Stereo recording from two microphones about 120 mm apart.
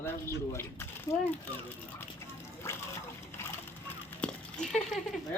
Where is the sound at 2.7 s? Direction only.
20° left (ahead or behind).